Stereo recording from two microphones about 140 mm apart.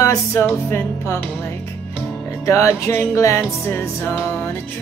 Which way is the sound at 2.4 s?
20° left (ahead or behind).